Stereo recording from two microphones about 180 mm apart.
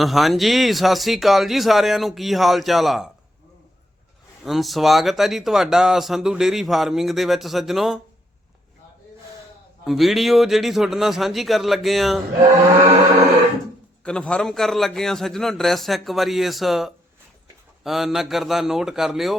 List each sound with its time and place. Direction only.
0.0 s speech: centre (ahead or behind)
4.4 s speech: centre (ahead or behind)
9.8 s speech: centre (ahead or behind)
14.0 s speech: 5° left (ahead or behind)